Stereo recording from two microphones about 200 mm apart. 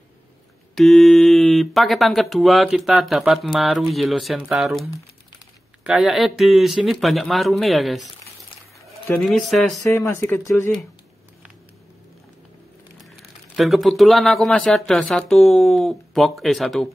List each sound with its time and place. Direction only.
0.7 s speech: centre (ahead or behind)
5.9 s speech: centre (ahead or behind)
9.0 s speech: 5° left (ahead or behind)
9.8 s speech: 15° left (ahead or behind)
13.1 s speech: centre (ahead or behind)